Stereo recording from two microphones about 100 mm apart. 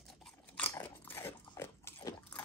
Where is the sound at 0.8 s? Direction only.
20° left (ahead or behind).